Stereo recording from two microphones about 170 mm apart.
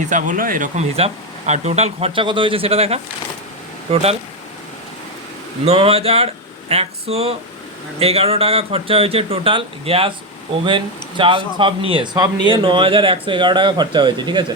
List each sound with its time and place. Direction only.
0.1 s speech: 50° right (ahead or behind)
5.6 s speech: 35° right (ahead or behind)